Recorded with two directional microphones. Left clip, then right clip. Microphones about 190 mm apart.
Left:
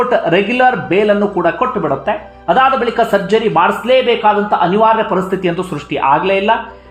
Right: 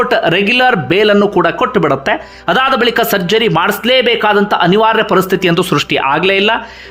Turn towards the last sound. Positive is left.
turn(degrees=-25)  # may be behind; listen again after turning